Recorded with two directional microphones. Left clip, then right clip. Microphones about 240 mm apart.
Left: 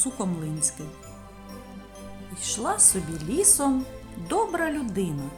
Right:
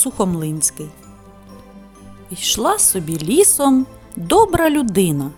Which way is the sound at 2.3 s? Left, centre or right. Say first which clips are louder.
Right 11 dB; right.